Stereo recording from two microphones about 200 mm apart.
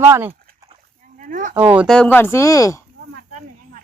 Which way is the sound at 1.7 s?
5° left (ahead or behind).